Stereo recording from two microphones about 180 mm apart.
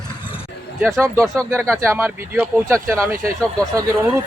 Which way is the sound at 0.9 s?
15° right (ahead or behind).